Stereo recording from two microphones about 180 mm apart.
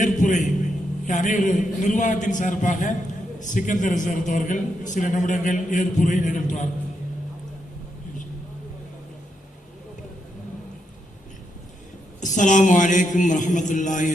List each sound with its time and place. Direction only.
0.0 s a man's voice: 45° left (ahead or behind)
12.2 s a man's voice: 45° left (ahead or behind)